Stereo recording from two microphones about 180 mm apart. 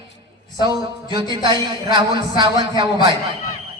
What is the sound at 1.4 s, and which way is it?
A man's voice, 25° right (ahead or behind).